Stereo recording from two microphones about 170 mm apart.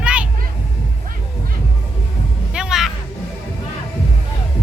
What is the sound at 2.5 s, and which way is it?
Music, 5° right (ahead or behind).